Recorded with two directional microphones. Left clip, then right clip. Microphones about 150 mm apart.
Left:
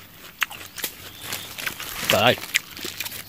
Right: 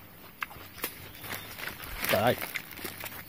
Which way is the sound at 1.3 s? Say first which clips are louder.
Left 8 dB; 35° left (ahead or behind).